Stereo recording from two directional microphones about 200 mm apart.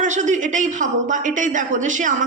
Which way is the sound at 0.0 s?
40° right (ahead or behind).